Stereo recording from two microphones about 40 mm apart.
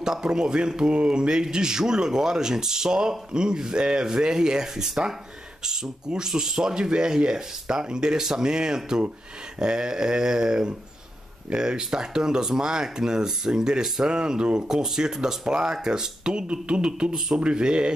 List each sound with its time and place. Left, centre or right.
0.0 s speech: centre